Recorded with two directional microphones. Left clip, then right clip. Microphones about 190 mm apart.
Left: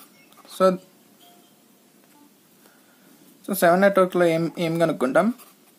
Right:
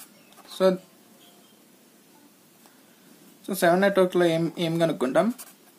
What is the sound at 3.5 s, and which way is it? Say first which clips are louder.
Speech: left 4 dB; 25° left (ahead or behind).